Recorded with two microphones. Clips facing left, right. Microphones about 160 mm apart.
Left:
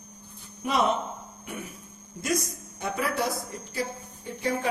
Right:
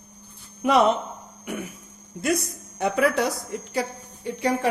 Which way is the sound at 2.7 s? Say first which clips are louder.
Right 7 dB; 70° right (ahead or behind).